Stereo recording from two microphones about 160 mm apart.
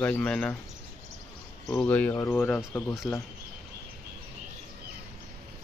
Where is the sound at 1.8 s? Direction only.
10° left (ahead or behind).